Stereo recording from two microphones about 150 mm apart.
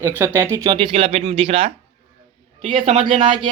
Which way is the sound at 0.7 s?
35° right (ahead or behind).